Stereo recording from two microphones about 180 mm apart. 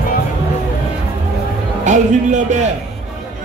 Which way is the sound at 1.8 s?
40° right (ahead or behind).